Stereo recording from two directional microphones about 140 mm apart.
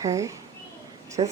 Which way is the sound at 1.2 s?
35° right (ahead or behind).